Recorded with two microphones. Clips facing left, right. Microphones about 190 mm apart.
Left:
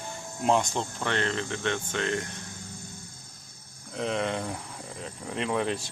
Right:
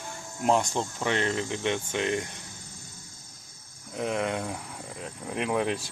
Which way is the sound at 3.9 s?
5° right (ahead or behind).